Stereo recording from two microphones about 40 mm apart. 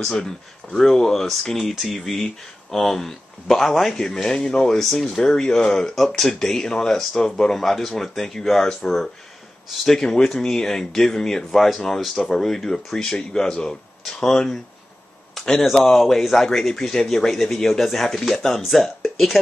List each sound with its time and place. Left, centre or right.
0.0 s a man's voice: centre
3.9 s a man's voice: centre
11.5 s a man's voice: centre